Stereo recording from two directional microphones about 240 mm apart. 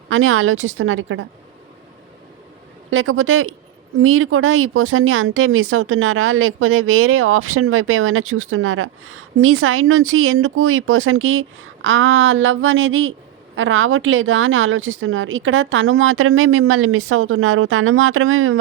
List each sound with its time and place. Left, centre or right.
0.1 s speech: right
2.9 s speech: right